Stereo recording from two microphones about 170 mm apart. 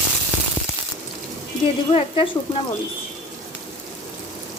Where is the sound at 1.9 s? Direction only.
35° left (ahead or behind).